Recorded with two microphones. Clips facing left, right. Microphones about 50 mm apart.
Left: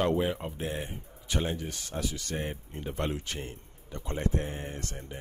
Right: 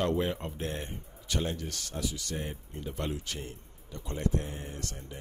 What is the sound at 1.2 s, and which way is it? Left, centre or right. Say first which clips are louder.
Speech: left 2 dB; left.